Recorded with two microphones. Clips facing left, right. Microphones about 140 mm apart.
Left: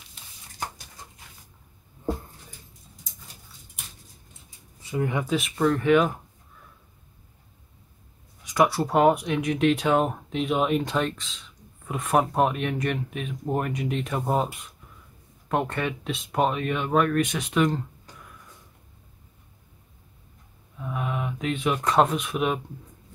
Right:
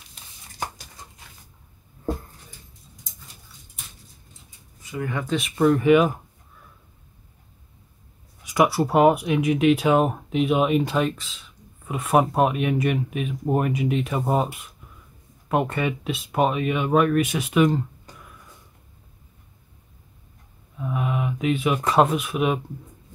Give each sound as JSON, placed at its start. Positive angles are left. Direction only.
{"t": 4.9, "sound": "speech", "side_deg": 20}
{"t": 5.6, "sound": "speech", "side_deg": -10}
{"t": 8.5, "sound": "speech", "side_deg": -10}
{"t": 20.8, "sound": "speech", "side_deg": -5}